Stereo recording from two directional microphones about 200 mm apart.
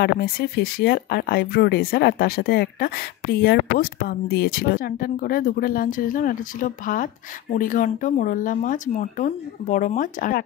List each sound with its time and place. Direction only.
0.0 s speech: 50° left (ahead or behind)